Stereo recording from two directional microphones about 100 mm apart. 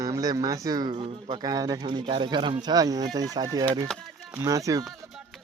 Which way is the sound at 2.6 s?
40° right (ahead or behind).